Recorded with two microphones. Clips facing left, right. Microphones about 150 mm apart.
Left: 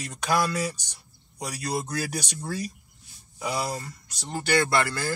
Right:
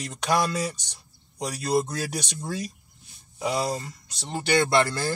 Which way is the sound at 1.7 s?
25° right (ahead or behind).